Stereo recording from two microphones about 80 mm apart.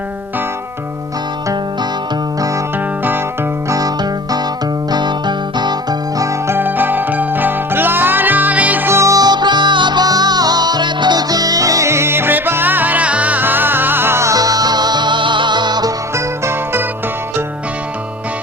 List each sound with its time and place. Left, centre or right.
2.7 s music: right
3.7 s music: right
6.6 s music: right
8.9 s music: right
9.2 s music: right
16.1 s music: right